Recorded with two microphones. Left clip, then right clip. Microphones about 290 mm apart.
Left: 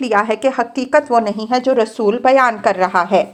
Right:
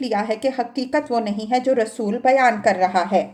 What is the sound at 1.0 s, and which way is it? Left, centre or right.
Speech, left.